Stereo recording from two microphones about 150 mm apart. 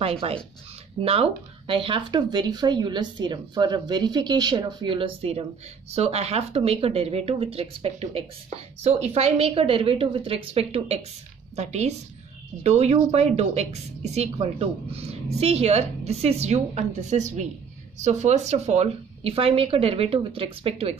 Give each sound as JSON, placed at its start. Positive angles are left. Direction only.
{"t": 0.0, "sound": "a woman's voice", "side_deg": -40}